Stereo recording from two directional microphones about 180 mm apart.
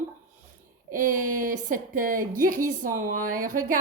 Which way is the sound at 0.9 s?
45° right (ahead or behind).